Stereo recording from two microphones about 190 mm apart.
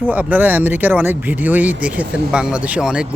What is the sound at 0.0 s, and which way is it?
Speech, 10° right (ahead or behind).